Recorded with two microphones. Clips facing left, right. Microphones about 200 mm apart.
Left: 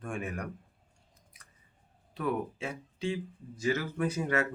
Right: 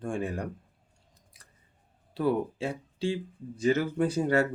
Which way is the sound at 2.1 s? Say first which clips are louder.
Right 5 dB; 30° right (ahead or behind).